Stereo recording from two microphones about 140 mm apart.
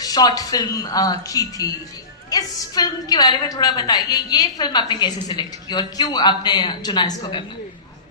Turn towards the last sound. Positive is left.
turn(degrees=30)  # may be behind; listen again after turning